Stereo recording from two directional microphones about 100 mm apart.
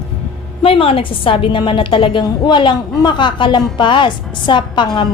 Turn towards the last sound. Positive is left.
turn(degrees=50)  # may be behind; listen again after turning